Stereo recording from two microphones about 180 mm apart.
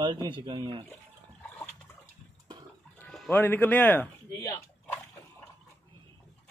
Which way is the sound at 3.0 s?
10° left (ahead or behind).